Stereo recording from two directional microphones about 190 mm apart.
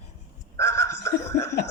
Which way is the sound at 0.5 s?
15° left (ahead or behind).